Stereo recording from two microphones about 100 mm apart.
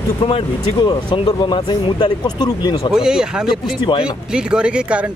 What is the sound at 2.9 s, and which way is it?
Speech, 5° right (ahead or behind).